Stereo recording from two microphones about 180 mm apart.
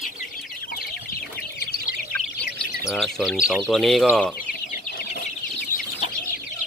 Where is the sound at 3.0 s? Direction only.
Centre (ahead or behind).